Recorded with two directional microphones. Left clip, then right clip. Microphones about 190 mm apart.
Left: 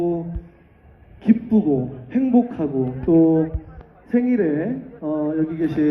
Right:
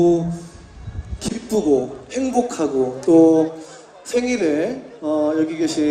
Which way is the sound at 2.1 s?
60° right (ahead or behind).